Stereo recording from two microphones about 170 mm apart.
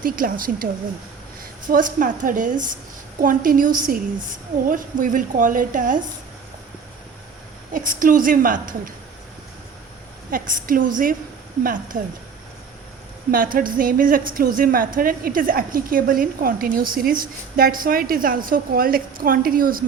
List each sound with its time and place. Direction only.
0.0 s a woman's voice: 55° right (ahead or behind)
7.7 s a woman's voice: 50° right (ahead or behind)
10.3 s a woman's voice: 50° right (ahead or behind)
13.3 s a woman's voice: 55° right (ahead or behind)